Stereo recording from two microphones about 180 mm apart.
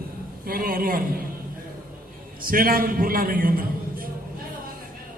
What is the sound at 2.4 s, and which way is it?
A man's voice, 50° right (ahead or behind).